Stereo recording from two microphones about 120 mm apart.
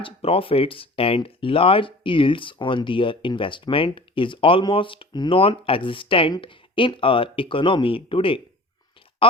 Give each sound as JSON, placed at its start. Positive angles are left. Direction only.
{"t": 0.0, "sound": "speech", "side_deg": 50}